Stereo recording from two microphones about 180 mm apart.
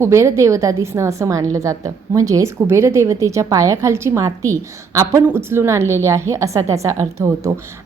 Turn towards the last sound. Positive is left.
turn(degrees=-15)  # may be behind; listen again after turning